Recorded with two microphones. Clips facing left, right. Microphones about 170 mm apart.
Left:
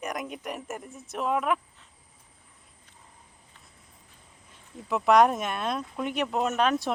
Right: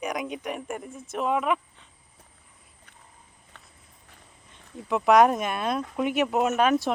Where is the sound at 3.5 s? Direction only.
70° right (ahead or behind).